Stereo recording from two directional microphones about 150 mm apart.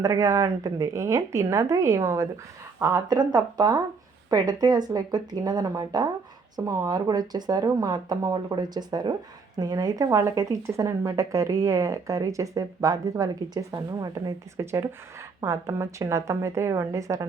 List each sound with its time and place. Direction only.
0.0 s a woman's voice: 20° right (ahead or behind)